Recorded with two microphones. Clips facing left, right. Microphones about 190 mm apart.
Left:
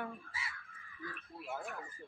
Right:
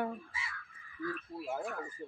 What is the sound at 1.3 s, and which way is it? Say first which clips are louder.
Speech: right 8 dB; 35° right (ahead or behind).